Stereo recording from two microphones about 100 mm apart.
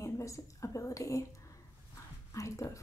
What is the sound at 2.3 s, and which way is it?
Speech, 30° left (ahead or behind).